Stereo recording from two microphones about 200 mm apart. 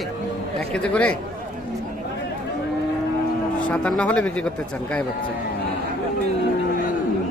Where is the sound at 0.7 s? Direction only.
5° left (ahead or behind).